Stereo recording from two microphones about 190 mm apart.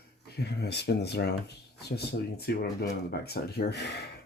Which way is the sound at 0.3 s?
60° left (ahead or behind).